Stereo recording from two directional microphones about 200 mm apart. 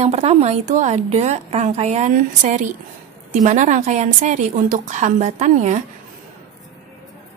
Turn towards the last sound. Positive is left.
turn(degrees=-35)  # may be behind; listen again after turning